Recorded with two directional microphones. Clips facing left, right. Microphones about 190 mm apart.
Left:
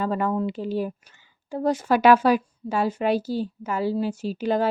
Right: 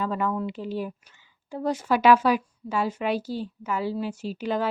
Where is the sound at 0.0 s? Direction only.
40° left (ahead or behind).